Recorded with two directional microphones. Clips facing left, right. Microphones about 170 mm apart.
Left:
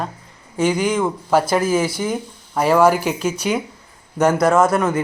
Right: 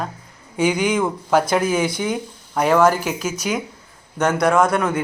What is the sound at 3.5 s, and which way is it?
Speech, centre (ahead or behind).